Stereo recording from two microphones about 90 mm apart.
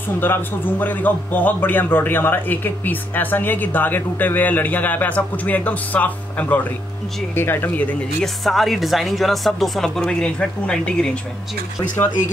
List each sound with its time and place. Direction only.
0.2 s a man's voice: 20° left (ahead or behind)
8.5 s speech: centre (ahead or behind)